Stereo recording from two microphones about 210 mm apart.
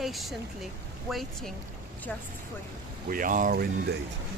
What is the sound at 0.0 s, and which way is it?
Speech, centre (ahead or behind).